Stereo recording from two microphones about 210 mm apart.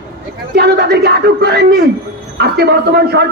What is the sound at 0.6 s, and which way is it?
A man's voice, 50° right (ahead or behind).